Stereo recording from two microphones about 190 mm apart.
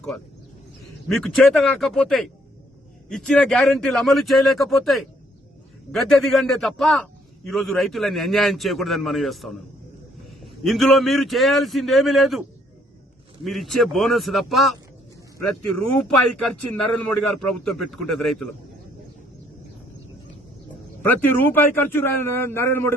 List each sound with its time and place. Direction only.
1.0 s a man's voice: centre (ahead or behind)
15.8 s a man's voice: centre (ahead or behind)
21.0 s a man's voice: 10° left (ahead or behind)